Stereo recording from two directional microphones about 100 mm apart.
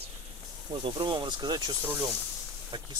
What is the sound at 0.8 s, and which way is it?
Speech, 50° right (ahead or behind).